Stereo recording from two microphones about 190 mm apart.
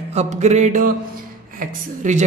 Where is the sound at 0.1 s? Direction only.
35° right (ahead or behind).